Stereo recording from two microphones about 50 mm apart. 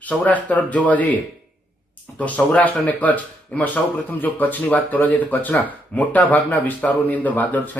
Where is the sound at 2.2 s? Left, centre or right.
Left.